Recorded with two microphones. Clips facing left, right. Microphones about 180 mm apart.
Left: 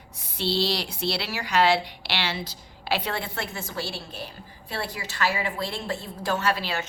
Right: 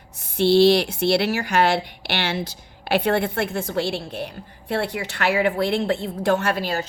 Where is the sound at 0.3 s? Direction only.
50° right (ahead or behind).